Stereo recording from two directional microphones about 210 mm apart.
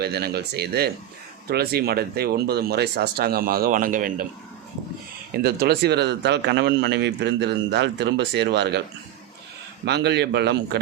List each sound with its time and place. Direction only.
0.0 s speech: 50° right (ahead or behind)
5.3 s speech: 50° right (ahead or behind)
9.8 s speech: 50° right (ahead or behind)